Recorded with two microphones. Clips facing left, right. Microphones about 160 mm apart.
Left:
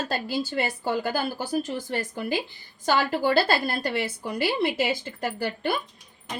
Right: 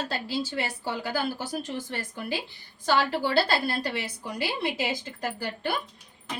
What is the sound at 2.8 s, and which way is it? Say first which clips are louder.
A woman's voice: left 2 dB; 50° left (ahead or behind).